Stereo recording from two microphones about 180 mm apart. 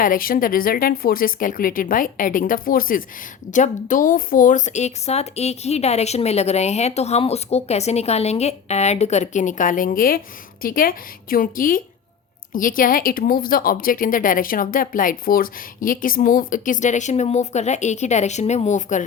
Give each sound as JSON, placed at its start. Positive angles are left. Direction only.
{"t": 0.0, "sound": "a woman's voice", "side_deg": 50}